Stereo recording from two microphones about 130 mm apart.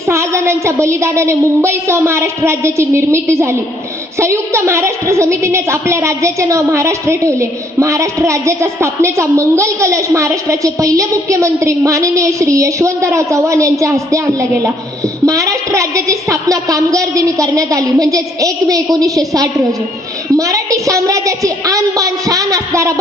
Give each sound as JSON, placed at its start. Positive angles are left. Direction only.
{"t": 0.1, "sound": "a woman's voice", "side_deg": -20}